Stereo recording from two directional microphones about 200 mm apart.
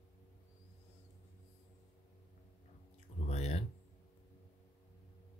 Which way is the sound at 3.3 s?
35° left (ahead or behind).